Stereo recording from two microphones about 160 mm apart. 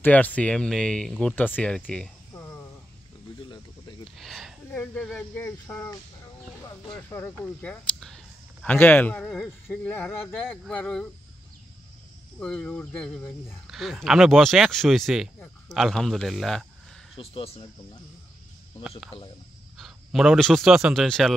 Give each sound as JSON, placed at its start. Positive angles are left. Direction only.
{"t": 0.0, "sound": "speech", "side_deg": 10}
{"t": 4.2, "sound": "speech", "side_deg": 0}
{"t": 12.4, "sound": "speech", "side_deg": 5}
{"t": 17.2, "sound": "speech", "side_deg": 35}
{"t": 18.9, "sound": "a man's voice", "side_deg": 0}